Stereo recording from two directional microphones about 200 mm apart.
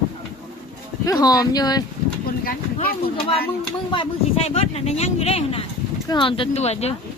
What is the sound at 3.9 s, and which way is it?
Speech, 25° left (ahead or behind).